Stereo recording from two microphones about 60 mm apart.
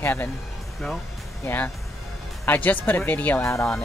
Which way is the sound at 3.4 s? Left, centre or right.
Left.